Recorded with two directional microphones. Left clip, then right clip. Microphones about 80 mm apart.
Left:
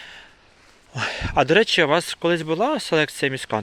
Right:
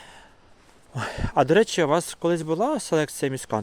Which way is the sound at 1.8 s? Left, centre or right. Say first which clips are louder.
Left 3 dB; right.